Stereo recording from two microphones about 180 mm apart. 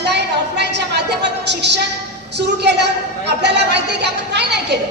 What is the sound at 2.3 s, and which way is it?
Music, 70° right (ahead or behind).